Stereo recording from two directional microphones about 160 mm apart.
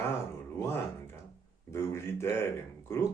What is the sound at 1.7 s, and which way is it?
Speech, 15° left (ahead or behind).